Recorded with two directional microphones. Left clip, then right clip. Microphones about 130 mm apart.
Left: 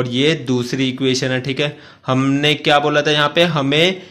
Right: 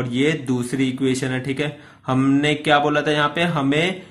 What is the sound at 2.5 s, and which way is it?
A man's voice, 40° left (ahead or behind).